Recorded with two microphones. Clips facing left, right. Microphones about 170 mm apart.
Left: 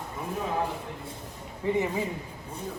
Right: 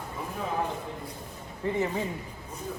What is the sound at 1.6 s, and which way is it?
Speech, 15° left (ahead or behind).